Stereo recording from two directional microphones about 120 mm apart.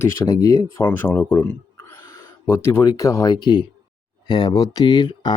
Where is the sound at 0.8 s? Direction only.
15° left (ahead or behind).